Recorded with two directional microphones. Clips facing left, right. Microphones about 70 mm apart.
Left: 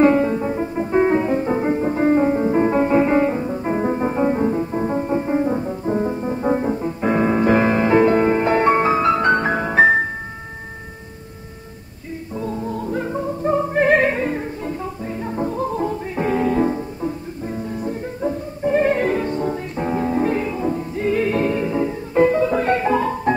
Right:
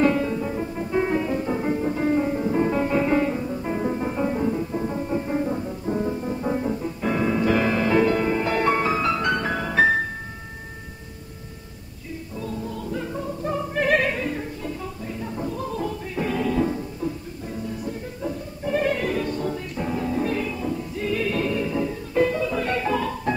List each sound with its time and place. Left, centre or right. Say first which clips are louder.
0.0 s music: left 6 dB; left
12.4 s music: left 6 dB; left